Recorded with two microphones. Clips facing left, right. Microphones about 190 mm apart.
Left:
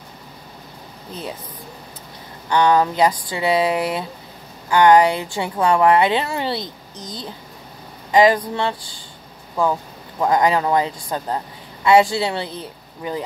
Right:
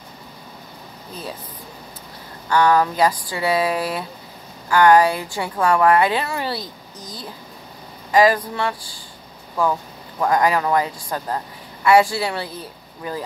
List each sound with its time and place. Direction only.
2.5 s a man's voice: 20° left (ahead or behind)
10.2 s a man's voice: 20° left (ahead or behind)